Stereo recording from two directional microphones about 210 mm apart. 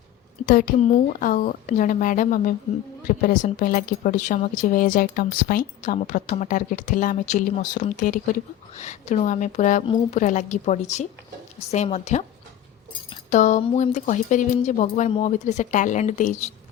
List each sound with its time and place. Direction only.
0.4 s speech: 40° left (ahead or behind)
9.8 s a woman's voice: 25° left (ahead or behind)
10.2 s speech: 35° left (ahead or behind)
13.3 s speech: 35° left (ahead or behind)